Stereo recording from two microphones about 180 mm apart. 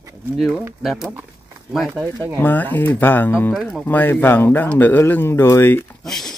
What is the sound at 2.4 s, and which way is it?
Speech, 10° left (ahead or behind).